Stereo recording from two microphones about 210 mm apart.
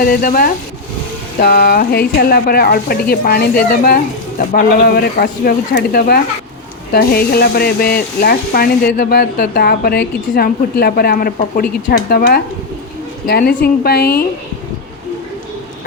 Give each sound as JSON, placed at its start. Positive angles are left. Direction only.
{"t": 0.0, "sound": "speech", "side_deg": 45}